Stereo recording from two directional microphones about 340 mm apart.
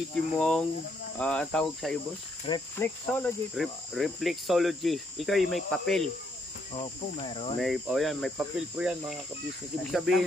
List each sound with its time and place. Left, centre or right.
0.1 s cricket: centre
7.2 s speech: centre
7.5 s cricket: centre